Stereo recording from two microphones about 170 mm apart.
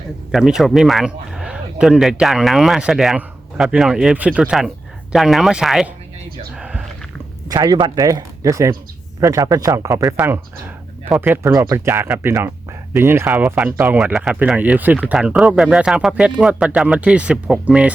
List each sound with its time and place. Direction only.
0.3 s speech: 5° right (ahead or behind)
6.6 s a sound: 5° right (ahead or behind)
7.4 s speech: 20° right (ahead or behind)